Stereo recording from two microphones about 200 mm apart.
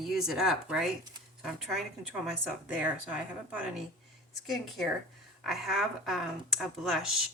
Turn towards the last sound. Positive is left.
turn(degrees=0)  # may be behind; listen again after turning